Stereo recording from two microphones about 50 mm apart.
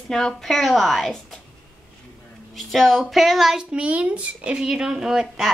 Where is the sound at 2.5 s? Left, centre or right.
Centre.